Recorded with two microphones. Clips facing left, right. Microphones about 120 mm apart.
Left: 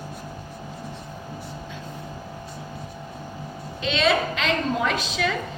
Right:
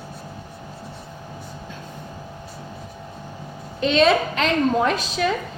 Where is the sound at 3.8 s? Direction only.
45° right (ahead or behind).